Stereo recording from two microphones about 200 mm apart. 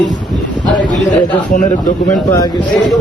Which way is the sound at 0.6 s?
40° left (ahead or behind).